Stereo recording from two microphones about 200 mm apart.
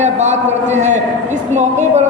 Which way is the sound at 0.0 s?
35° right (ahead or behind).